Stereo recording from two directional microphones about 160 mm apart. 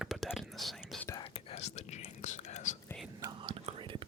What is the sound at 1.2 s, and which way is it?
Whispering, 40° left (ahead or behind).